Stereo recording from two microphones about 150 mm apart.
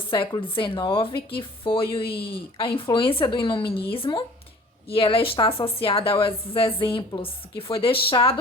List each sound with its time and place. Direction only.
0.1 s speech: 35° left (ahead or behind)